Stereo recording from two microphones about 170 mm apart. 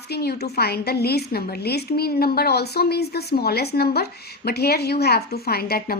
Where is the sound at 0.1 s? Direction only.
70° left (ahead or behind).